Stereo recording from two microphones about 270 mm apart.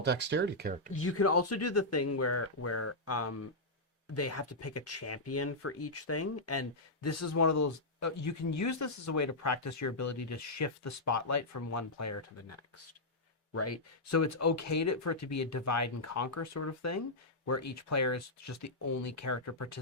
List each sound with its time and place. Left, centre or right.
0.0 s speech: right
0.9 s speech: left